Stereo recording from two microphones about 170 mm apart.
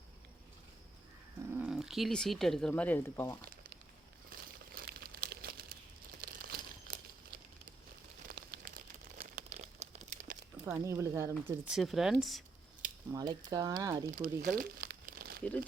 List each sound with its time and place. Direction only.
1.5 s speech: 10° right (ahead or behind); by 3.3 s 10° left (ahead or behind)
4.3 s crumpling: 60° right (ahead or behind)
8.4 s crumpling: 55° right (ahead or behind)
9.5 s crumpling: 40° right (ahead or behind)
10.7 s speech: 15° right (ahead or behind)
13.1 s speech: 20° right (ahead or behind)
14.1 s speech: 60° right (ahead or behind)
14.5 s crumpling: 60° right (ahead or behind)